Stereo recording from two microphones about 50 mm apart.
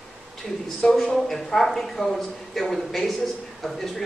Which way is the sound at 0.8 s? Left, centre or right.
Centre.